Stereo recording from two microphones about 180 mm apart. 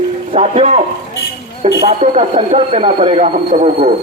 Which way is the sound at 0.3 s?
40° right (ahead or behind).